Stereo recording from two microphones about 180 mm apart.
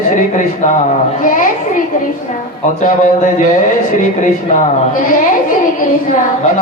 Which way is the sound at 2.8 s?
45° left (ahead or behind).